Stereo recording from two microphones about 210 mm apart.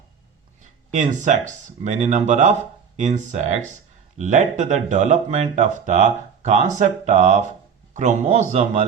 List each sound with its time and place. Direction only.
0.9 s speech: 35° right (ahead or behind)